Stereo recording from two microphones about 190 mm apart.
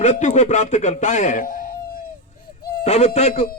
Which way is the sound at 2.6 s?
55° left (ahead or behind).